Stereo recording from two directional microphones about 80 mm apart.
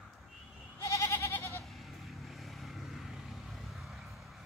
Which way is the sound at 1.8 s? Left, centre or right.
Centre.